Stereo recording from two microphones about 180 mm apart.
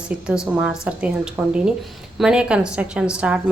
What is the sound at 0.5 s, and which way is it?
A woman's voice, 5° right (ahead or behind).